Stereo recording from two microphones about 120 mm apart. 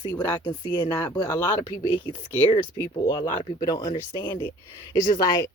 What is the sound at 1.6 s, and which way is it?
Speech, 45° left (ahead or behind).